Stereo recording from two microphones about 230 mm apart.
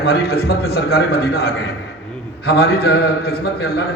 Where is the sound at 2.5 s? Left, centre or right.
Left.